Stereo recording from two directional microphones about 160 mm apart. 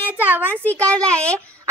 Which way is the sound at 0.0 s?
10° right (ahead or behind).